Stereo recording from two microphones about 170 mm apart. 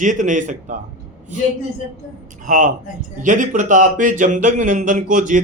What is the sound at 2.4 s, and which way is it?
Speech, 50° right (ahead or behind).